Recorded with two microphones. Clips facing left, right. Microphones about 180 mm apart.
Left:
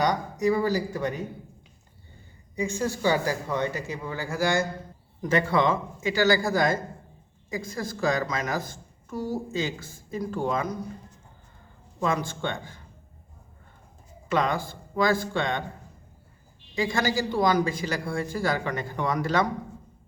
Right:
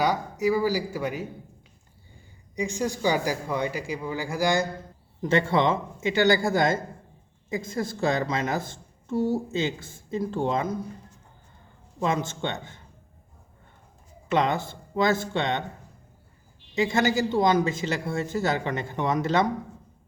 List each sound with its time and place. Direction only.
0.0 s speech: 10° right (ahead or behind)
2.6 s a woman's voice: 15° right (ahead or behind)
11.9 s a woman's voice: 20° right (ahead or behind)
14.3 s a woman's voice: 25° right (ahead or behind)
16.7 s a woman's voice: 25° right (ahead or behind)